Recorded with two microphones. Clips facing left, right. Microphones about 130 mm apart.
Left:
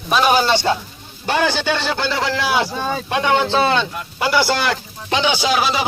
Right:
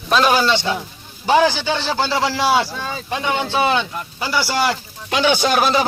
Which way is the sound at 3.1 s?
80° left.